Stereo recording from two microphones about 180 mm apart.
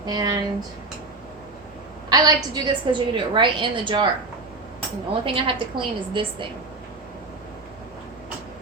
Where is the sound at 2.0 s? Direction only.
25° right (ahead or behind).